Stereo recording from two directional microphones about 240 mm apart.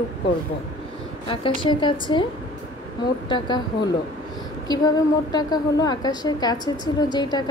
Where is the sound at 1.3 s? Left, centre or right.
Left.